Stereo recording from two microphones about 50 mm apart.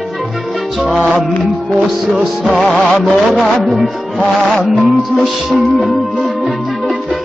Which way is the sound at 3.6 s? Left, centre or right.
Centre.